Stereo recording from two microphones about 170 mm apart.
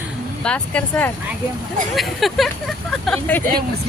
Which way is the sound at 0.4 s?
5° left (ahead or behind).